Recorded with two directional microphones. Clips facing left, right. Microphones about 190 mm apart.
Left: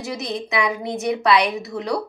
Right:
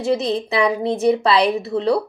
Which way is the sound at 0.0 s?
30° right (ahead or behind).